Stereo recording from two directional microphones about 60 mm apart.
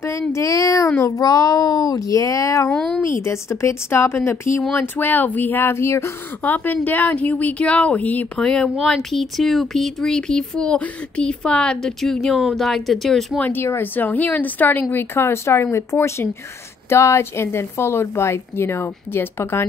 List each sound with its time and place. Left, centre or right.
0.3 s speech: left
1.0 s a woman's voice: left
4.7 s speech: left
6.4 s speech: left
8.8 s speech: centre
13.7 s a woman's voice: left